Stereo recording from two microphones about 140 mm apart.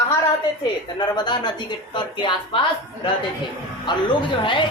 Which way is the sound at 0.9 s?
30° left (ahead or behind).